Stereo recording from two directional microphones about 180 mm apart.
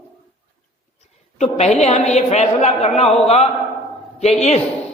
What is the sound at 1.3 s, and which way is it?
A woman's voice, 40° left (ahead or behind).